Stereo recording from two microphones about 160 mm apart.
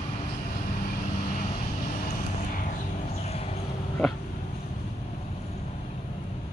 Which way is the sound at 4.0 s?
Centre (ahead or behind).